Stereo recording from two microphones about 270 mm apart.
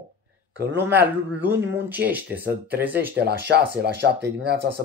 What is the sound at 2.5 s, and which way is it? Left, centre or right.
Speech, right.